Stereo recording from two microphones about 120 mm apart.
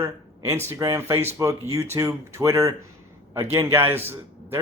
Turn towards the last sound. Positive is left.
turn(degrees=-20)  # may be behind; listen again after turning